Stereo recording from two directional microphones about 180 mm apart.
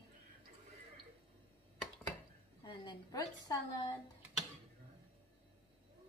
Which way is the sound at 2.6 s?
25° left (ahead or behind).